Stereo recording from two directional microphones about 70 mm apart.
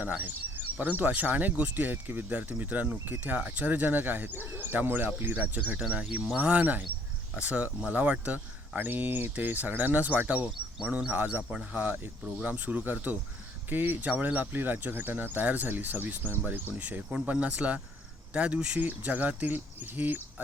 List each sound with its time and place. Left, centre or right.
0.0 s speech: right